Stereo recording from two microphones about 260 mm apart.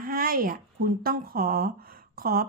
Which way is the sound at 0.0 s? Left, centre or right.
Right.